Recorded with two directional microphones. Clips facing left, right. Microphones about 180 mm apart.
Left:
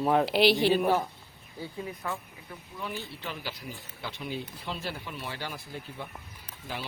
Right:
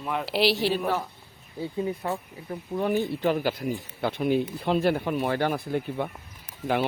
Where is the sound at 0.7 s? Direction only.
10° left (ahead or behind).